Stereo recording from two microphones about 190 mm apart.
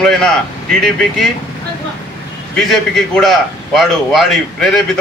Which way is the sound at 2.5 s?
Centre (ahead or behind).